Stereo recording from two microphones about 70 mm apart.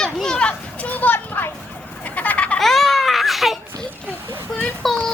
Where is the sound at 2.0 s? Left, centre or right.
Left.